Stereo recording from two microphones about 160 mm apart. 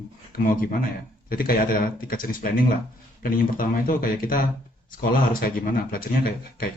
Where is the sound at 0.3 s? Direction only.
60° left (ahead or behind).